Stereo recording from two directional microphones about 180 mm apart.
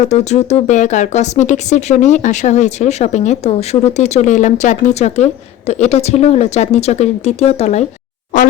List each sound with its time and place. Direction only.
0.1 s speech: 40° left (ahead or behind)